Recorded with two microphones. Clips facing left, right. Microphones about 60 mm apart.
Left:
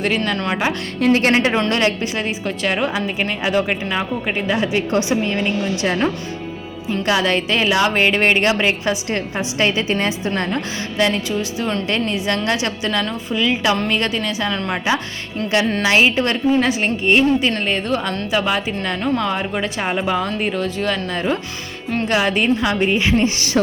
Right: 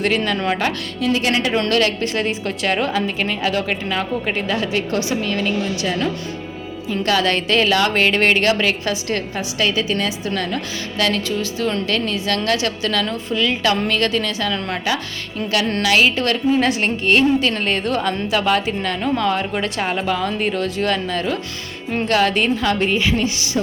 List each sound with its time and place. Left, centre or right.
1.0 s speech: left
1.7 s a woman's voice: centre
7.0 s a woman's voice: centre
15.8 s a woman's voice: left
16.6 s a woman's voice: centre